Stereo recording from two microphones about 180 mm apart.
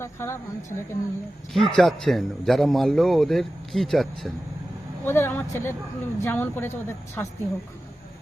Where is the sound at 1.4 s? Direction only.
Centre (ahead or behind).